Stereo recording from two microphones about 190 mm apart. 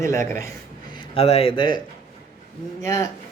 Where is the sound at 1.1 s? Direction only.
30° left (ahead or behind); by 3.1 s 15° left (ahead or behind).